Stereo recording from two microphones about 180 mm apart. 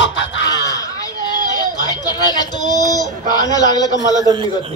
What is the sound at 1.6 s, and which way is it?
Speech, 20° left (ahead or behind).